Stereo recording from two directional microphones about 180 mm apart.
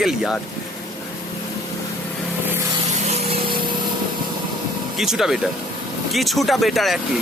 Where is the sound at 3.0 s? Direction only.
35° right (ahead or behind).